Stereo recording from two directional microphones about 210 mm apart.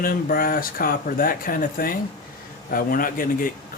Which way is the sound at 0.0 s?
45° left (ahead or behind).